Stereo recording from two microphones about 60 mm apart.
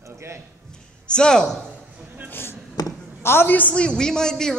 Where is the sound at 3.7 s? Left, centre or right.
Centre.